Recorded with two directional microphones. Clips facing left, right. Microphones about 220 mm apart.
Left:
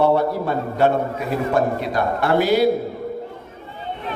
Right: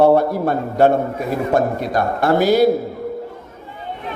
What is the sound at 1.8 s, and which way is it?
Speech, 45° right (ahead or behind).